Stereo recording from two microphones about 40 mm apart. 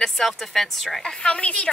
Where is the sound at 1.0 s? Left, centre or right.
Left.